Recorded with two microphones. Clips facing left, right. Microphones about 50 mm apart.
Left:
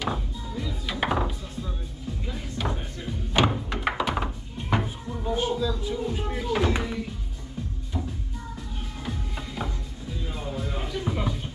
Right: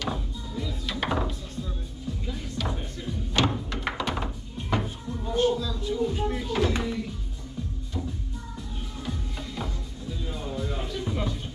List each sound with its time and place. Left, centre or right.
0.0 s music: centre
9.6 s music: left